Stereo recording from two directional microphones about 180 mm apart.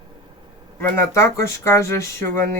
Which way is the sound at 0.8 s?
15° left (ahead or behind).